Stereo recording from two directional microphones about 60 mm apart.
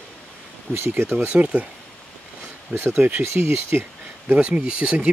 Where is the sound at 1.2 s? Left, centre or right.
Centre.